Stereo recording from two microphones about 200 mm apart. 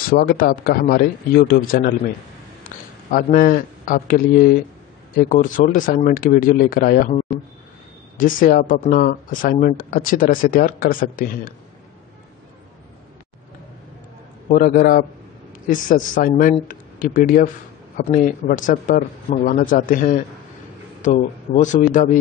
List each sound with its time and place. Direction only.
0.1 s a man's voice: 45° left (ahead or behind)
8.2 s speech: 45° left (ahead or behind)
14.5 s speech: 45° left (ahead or behind)